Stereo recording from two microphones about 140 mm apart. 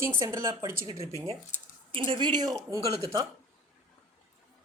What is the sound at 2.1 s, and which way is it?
A woman's voice, 30° right (ahead or behind).